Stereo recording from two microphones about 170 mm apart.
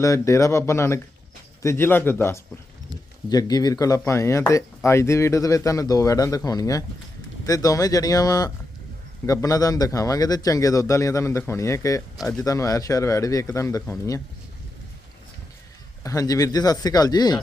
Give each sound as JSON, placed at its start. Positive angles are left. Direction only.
{"t": 0.0, "sound": "speech", "side_deg": 20}
{"t": 12.1, "sound": "speech", "side_deg": 0}
{"t": 12.4, "sound": "speech", "side_deg": 20}
{"t": 16.0, "sound": "speech", "side_deg": 20}